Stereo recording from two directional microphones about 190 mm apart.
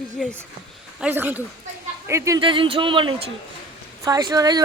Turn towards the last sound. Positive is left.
turn(degrees=-20)  # may be behind; listen again after turning